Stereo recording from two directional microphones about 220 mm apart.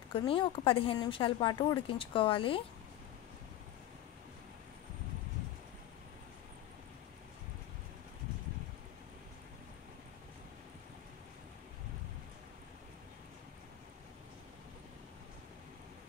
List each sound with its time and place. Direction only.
0.1 s speech: 25° left (ahead or behind)